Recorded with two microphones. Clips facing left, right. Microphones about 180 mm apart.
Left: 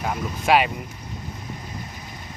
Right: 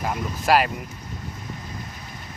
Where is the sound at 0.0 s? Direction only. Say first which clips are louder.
Even; centre (ahead or behind).